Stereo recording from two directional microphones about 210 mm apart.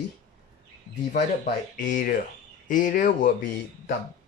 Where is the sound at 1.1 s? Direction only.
45° left (ahead or behind).